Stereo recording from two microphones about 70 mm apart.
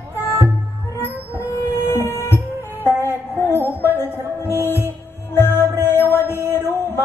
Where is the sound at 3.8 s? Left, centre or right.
Left.